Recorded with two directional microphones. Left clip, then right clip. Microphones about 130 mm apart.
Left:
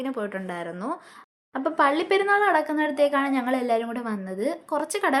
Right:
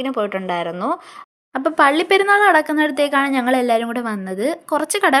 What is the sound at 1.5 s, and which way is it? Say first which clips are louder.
Speech: right 7 dB; 50° right (ahead or behind).